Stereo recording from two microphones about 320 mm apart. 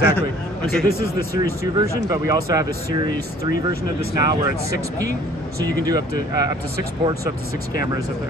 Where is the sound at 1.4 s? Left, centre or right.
Centre.